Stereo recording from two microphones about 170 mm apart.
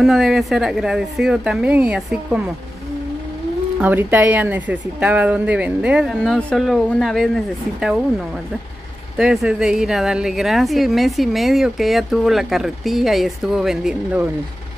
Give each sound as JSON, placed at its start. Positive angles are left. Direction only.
{"t": 0.0, "sound": "a woman's voice", "side_deg": 0}
{"t": 3.8, "sound": "a woman's voice", "side_deg": -10}
{"t": 9.1, "sound": "a woman's voice", "side_deg": -5}